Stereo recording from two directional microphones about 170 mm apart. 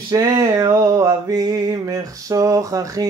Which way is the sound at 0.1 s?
20° right (ahead or behind).